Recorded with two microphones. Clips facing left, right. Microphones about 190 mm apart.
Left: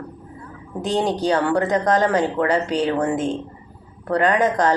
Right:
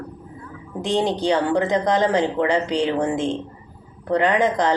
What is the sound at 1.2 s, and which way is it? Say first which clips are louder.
Speech: even; 25° right (ahead or behind).